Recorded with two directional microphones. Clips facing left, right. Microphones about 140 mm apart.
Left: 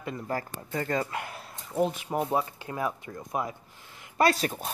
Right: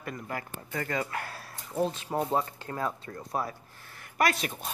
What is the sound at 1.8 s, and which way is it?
Speech, 15° left (ahead or behind).